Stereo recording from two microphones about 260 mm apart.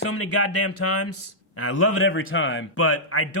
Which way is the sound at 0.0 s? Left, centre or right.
Left.